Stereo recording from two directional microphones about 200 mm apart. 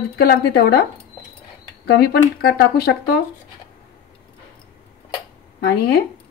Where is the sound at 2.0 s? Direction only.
50° left (ahead or behind).